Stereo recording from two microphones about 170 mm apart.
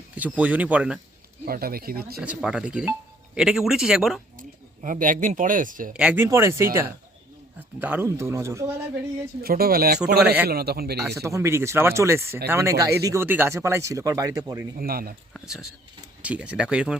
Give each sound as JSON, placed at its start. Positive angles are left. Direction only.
{"t": 0.2, "sound": "speech", "side_deg": -10}
{"t": 1.5, "sound": "speech", "side_deg": -60}
{"t": 2.2, "sound": "speech", "side_deg": -5}
{"t": 4.4, "sound": "speech", "side_deg": -50}
{"t": 5.9, "sound": "speech", "side_deg": -5}
{"t": 7.8, "sound": "speech", "side_deg": -10}
{"t": 9.4, "sound": "speech", "side_deg": -60}
{"t": 11.1, "sound": "speech", "side_deg": -20}
{"t": 14.8, "sound": "speech", "side_deg": -60}
{"t": 15.3, "sound": "speech", "side_deg": 0}